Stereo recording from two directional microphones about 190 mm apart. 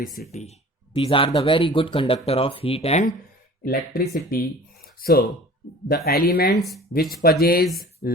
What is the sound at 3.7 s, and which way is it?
Speech, 50° left (ahead or behind).